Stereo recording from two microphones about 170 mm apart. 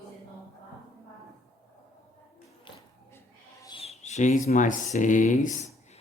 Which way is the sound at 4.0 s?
45° left (ahead or behind).